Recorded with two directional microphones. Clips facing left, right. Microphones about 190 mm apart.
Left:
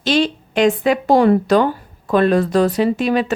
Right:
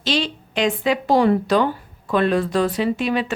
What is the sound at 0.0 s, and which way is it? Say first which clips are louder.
Speech: left 6 dB; 50° left (ahead or behind).